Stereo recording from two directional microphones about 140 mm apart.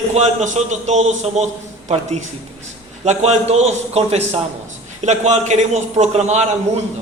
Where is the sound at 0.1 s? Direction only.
55° right (ahead or behind).